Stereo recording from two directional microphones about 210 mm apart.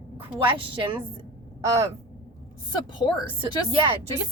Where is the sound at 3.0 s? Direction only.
20° left (ahead or behind).